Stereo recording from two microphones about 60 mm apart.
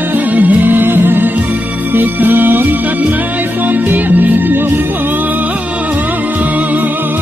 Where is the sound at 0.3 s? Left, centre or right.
Right.